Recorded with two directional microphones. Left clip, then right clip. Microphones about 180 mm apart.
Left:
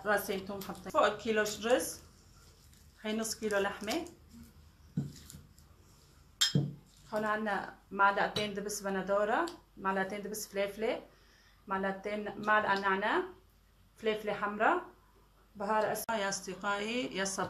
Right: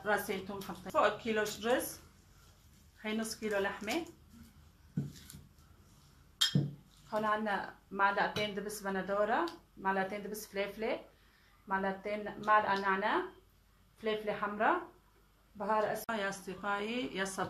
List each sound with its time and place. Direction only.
0.0 s speech: 15° left (ahead or behind)
3.0 s speech: 15° left (ahead or behind)
7.1 s a woman's voice: 20° left (ahead or behind)
16.1 s speech: 10° left (ahead or behind)